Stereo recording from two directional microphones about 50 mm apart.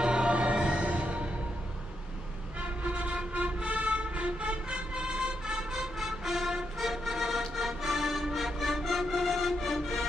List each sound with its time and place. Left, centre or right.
0.0 s music: centre
2.8 s vehicle: right; by 10.0 s centre